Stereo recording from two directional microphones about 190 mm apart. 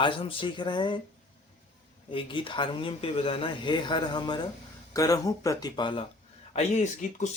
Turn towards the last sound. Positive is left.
turn(degrees=40)  # may be behind; listen again after turning